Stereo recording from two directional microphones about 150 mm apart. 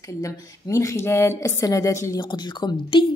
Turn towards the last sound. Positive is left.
turn(degrees=35)  # may be behind; listen again after turning